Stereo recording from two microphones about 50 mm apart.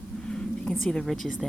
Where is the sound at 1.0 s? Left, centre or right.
Centre.